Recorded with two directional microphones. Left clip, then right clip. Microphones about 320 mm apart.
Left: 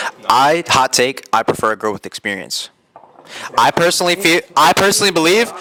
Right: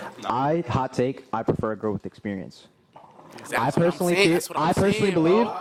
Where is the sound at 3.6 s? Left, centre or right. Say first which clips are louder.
Left 11 dB; centre.